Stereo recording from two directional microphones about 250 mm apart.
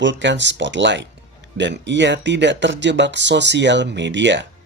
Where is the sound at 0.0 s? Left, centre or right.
Right.